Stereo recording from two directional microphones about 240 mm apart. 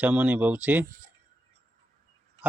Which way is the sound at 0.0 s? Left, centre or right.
Centre.